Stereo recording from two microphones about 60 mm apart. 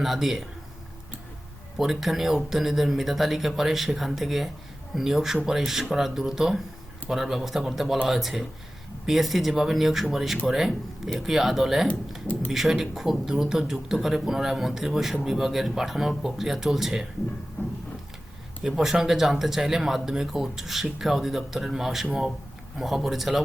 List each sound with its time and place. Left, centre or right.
0.0 s speech: centre
1.8 s a man's voice: centre
17.6 s a sound: left
18.6 s speech: centre